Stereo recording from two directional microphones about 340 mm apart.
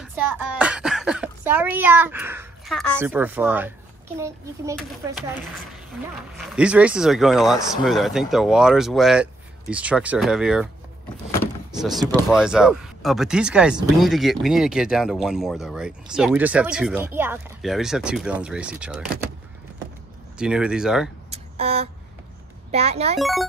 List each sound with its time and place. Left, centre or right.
0.0 s a child's voice: centre
6.3 s speech: centre
11.8 s speech: centre
20.3 s speech: centre
21.3 s a sound: centre
22.7 s a child's voice: centre
23.1 s speech: centre